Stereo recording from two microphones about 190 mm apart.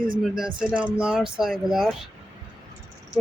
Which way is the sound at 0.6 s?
5° right (ahead or behind).